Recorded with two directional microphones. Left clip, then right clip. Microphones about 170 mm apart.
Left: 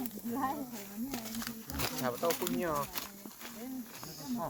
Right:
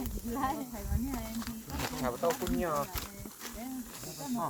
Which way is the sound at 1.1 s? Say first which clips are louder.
Right 2 dB; 55° left (ahead or behind).